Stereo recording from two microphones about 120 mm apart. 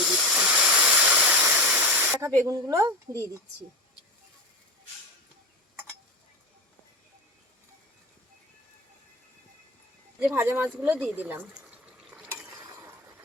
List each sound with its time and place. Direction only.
0.0 s waterfall: centre (ahead or behind)
2.2 s speech: 30° right (ahead or behind)
10.3 s speech: 20° right (ahead or behind)
12.1 s stir: 5° right (ahead or behind)
12.5 s a sound: 25° right (ahead or behind)